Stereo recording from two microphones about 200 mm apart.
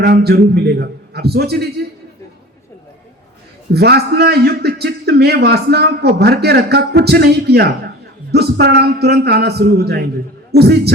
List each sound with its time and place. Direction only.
0.0 s a man's voice: 55° right (ahead or behind)
3.7 s a man's voice: 55° right (ahead or behind)